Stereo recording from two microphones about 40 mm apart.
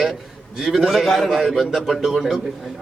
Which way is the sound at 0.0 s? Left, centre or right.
Centre.